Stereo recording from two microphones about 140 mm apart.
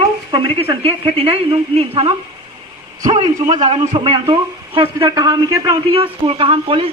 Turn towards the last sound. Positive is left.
turn(degrees=-40)  # may be behind; listen again after turning